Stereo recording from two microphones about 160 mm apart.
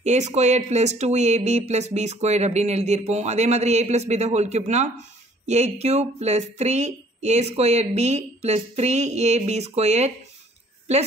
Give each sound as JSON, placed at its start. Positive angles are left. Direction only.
{"t": 0.0, "sound": "speech", "side_deg": -45}